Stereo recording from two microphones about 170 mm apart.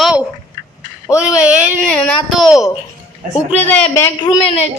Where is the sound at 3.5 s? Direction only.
10° left (ahead or behind).